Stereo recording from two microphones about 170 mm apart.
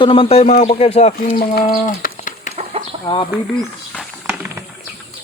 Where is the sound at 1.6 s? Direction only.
50° left (ahead or behind).